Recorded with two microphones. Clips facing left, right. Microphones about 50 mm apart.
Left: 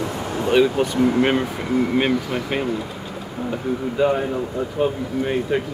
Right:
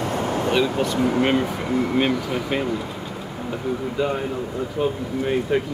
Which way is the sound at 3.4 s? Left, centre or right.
Centre.